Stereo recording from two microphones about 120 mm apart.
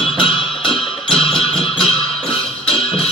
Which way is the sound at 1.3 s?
5° left (ahead or behind).